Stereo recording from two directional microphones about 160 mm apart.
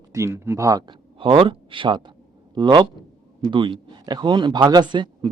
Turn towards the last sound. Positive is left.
turn(degrees=-30)  # may be behind; listen again after turning